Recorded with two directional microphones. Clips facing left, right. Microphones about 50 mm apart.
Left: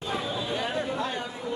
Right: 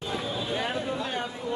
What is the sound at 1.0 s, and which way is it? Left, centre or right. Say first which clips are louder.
Chatter: even; right.